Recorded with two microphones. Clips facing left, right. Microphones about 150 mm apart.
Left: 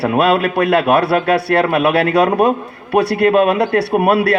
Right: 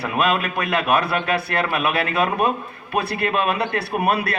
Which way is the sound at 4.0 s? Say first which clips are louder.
Left 5 dB; 90° left.